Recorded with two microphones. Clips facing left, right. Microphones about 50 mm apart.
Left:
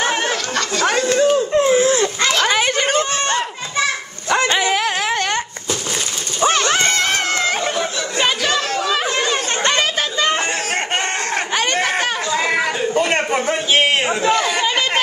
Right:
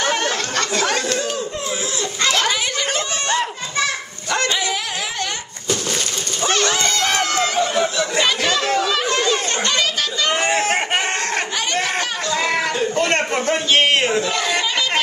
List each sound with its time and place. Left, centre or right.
0.0 s chatter: centre
0.8 s a sound: centre
1.5 s a sound: left
4.5 s bow-wow: left
6.4 s dog: left
6.7 s run: left
8.7 s children playing: centre
9.7 s chatter: left
12.3 s a sound: centre
14.3 s chatter: centre